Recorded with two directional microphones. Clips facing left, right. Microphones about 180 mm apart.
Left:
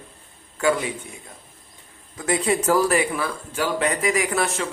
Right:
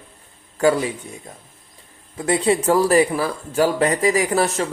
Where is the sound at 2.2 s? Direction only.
30° right (ahead or behind).